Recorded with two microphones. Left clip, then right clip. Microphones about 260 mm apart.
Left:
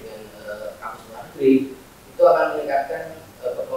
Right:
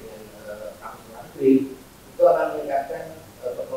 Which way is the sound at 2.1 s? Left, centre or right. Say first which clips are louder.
Left 2 dB; centre.